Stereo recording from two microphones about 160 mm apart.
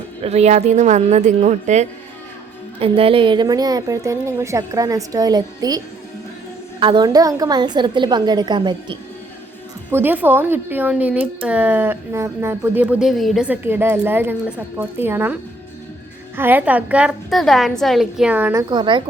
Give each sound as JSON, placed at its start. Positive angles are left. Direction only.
{"t": 0.2, "sound": "a woman's voice", "side_deg": -40}
{"t": 2.8, "sound": "a woman's voice", "side_deg": -35}
{"t": 9.9, "sound": "speech", "side_deg": -10}
{"t": 16.4, "sound": "speech", "side_deg": -10}
{"t": 18.7, "sound": "a woman's voice", "side_deg": -30}